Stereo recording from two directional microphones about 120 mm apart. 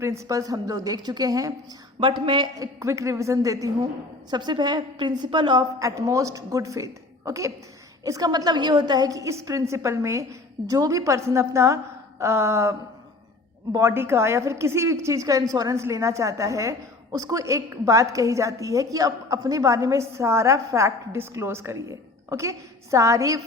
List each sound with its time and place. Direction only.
0.0 s a woman's voice: 25° right (ahead or behind)
2.0 s a woman's voice: 45° right (ahead or behind)
2.6 s a woman's voice: 25° right (ahead or behind); by 5.6 s 40° right (ahead or behind)
5.8 s a woman's voice: 25° right (ahead or behind)
13.7 s a woman's voice: 20° right (ahead or behind)